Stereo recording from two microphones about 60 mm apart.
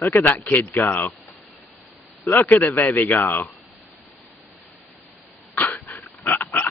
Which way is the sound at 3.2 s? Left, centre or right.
Left.